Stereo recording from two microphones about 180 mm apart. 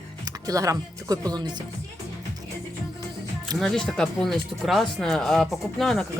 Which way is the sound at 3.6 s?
Centre (ahead or behind).